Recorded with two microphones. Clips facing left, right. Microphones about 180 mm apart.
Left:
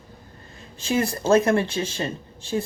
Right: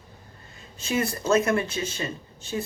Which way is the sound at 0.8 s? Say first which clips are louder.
Left 3 dB; 30° left (ahead or behind).